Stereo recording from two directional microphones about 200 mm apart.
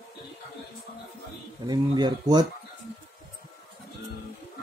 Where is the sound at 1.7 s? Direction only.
20° right (ahead or behind).